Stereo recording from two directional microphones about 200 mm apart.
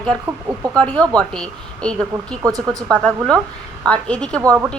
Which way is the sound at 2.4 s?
20° right (ahead or behind).